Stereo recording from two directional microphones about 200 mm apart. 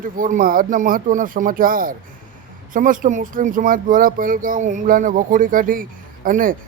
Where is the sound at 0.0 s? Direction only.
45° right (ahead or behind).